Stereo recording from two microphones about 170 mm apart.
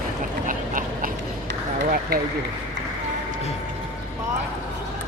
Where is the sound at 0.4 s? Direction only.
50° right (ahead or behind).